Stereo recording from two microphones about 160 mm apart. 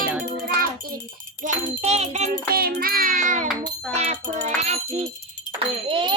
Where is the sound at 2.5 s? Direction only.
70° right (ahead or behind); by 3.5 s 50° right (ahead or behind).